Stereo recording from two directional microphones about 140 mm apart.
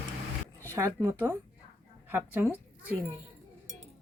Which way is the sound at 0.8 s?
20° right (ahead or behind).